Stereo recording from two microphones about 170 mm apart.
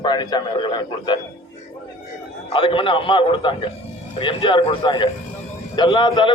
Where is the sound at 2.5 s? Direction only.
30° left (ahead or behind).